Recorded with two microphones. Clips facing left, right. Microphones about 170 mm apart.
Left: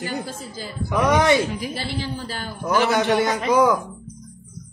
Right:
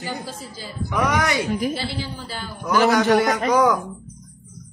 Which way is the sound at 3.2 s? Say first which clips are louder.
Even; 25° left (ahead or behind).